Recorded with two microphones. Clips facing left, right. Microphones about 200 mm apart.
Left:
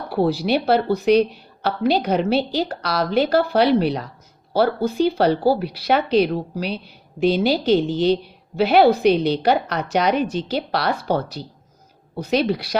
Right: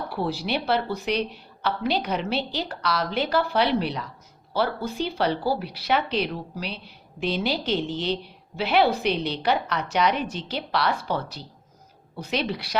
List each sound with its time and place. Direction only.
0.1 s a woman's voice: 40° left (ahead or behind)